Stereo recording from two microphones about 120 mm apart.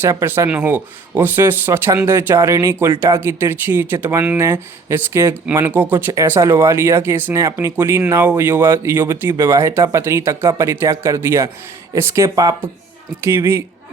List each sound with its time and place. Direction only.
0.0 s speech: 20° right (ahead or behind)